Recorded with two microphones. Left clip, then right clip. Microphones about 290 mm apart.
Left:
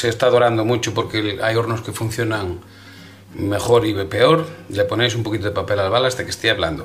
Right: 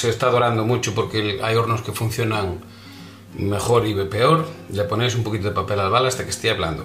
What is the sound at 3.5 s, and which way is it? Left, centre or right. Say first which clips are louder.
Speech: left 3 dB; left.